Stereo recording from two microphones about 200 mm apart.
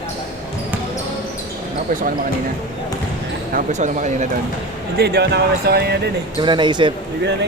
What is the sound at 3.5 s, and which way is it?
Speech, 40° right (ahead or behind).